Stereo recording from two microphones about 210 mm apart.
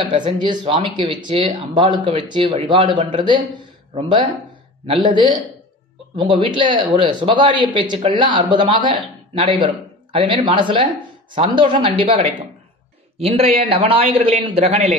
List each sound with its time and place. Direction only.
0.1 s a man's voice: 25° right (ahead or behind)